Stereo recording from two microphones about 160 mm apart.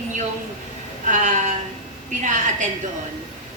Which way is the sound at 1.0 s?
50° right (ahead or behind).